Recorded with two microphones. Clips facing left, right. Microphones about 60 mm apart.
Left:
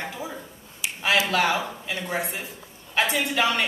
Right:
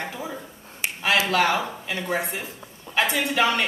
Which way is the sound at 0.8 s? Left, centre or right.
Right.